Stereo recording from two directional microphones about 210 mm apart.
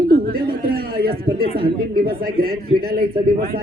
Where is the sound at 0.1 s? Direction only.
45° right (ahead or behind).